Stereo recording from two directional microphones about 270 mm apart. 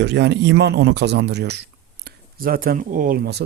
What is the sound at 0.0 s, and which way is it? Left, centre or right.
A man's voice, right.